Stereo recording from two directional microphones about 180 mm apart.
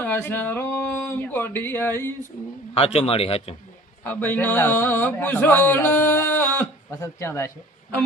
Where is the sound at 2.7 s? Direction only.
30° left (ahead or behind).